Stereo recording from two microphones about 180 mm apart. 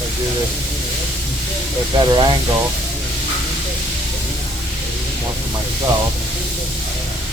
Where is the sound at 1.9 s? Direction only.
25° right (ahead or behind).